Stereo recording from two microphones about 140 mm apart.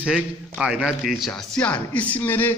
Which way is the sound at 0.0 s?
5° right (ahead or behind).